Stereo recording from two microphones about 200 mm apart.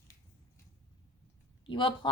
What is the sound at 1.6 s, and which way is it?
Speech, 25° left (ahead or behind).